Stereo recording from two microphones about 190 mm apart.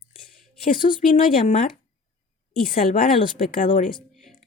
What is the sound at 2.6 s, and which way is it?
A woman's voice, 45° left (ahead or behind).